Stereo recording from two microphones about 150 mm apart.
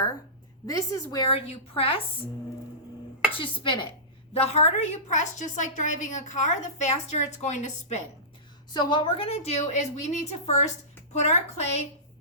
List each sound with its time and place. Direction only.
0.7 s a woman's voice: 20° left (ahead or behind)
1.3 s a woman's voice: 40° left (ahead or behind)
3.3 s a woman's voice: 35° left (ahead or behind)
4.4 s a woman's voice: 45° left (ahead or behind)
8.7 s a woman's voice: 30° left (ahead or behind); by 11.8 s 50° left (ahead or behind)